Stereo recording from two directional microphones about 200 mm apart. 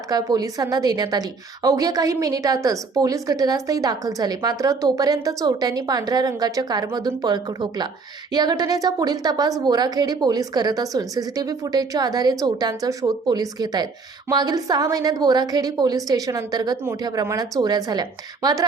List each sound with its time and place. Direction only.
0.1 s a woman's voice: 20° right (ahead or behind)